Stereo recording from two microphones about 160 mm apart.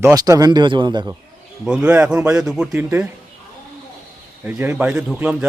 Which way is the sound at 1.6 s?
5° right (ahead or behind).